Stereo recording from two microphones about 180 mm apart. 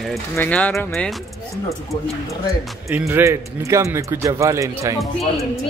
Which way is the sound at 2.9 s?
10° right (ahead or behind).